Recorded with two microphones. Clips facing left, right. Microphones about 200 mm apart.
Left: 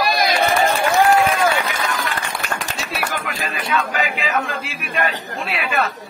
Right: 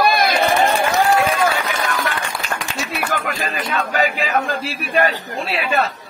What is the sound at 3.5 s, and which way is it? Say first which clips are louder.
Speech: left 3 dB; 40° right (ahead or behind).